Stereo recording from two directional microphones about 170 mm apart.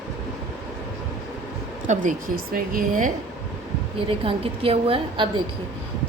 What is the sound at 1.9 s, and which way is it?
A woman's voice, 50° right (ahead or behind).